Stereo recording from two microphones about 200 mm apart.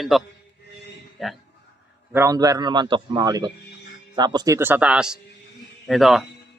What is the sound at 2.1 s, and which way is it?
A man's voice, 15° right (ahead or behind).